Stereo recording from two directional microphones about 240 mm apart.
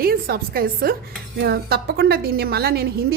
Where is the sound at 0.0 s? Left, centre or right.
Right.